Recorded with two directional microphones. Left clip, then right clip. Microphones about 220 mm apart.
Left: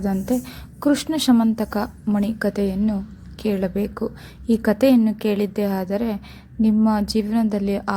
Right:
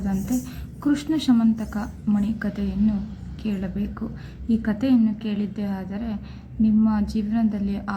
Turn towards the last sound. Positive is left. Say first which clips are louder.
# left 5 dB
turn(degrees=35)  # may be behind; listen again after turning